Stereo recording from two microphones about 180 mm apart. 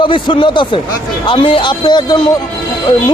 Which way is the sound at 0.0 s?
30° left (ahead or behind).